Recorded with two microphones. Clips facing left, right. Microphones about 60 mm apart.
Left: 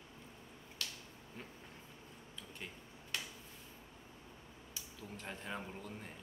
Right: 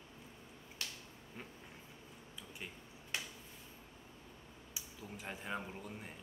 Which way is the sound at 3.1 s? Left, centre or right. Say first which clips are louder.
Right 1 dB; right.